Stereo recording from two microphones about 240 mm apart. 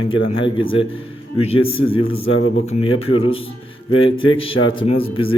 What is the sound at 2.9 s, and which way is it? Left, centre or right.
Speech, left.